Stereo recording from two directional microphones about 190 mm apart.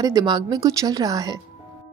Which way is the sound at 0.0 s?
20° right (ahead or behind).